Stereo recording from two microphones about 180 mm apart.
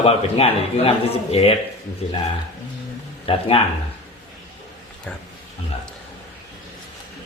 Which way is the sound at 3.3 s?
30° left (ahead or behind).